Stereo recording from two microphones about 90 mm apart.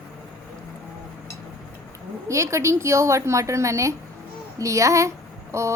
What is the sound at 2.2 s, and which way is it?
A woman's voice, 35° right (ahead or behind).